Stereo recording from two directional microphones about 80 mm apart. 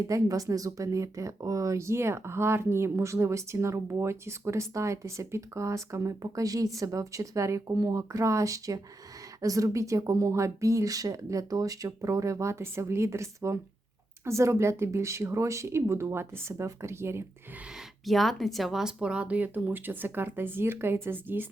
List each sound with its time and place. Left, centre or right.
0.1 s speech: right
18.0 s speech: centre; by 21.4 s right